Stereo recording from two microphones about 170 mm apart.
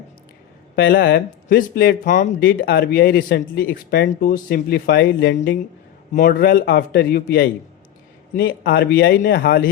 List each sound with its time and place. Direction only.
0.8 s speech: 80° left
6.1 s speech: 55° left (ahead or behind)